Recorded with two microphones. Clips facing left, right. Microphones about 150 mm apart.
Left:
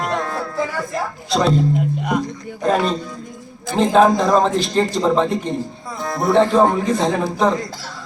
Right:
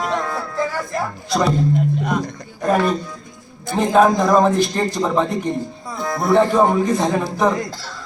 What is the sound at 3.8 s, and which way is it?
Speech, 10° right (ahead or behind).